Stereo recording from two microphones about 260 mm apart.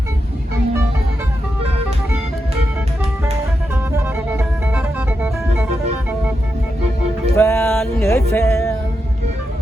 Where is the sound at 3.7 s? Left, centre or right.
Centre.